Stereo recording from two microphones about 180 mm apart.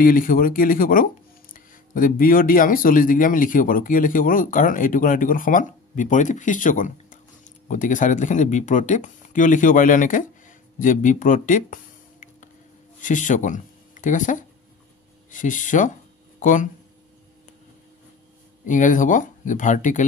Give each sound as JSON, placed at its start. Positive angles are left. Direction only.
{"t": 0.0, "sound": "speech", "side_deg": 50}
{"t": 18.7, "sound": "speech", "side_deg": 45}